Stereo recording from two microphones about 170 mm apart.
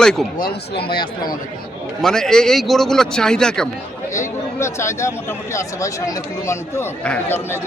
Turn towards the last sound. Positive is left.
turn(degrees=15)  # may be behind; listen again after turning